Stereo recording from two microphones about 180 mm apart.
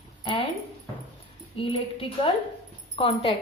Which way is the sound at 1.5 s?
30° left (ahead or behind).